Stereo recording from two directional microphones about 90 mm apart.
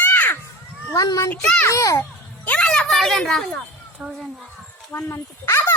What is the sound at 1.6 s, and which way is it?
Speech, 35° left (ahead or behind).